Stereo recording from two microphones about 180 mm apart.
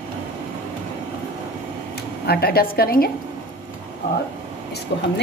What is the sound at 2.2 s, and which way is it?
Speech, 60° left (ahead or behind).